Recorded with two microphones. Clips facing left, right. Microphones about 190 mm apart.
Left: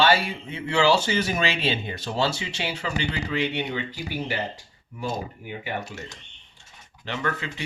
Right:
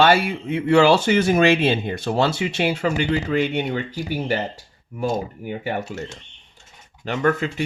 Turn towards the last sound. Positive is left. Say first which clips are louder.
# right 9 dB
turn(degrees=-45)  # may be behind; listen again after turning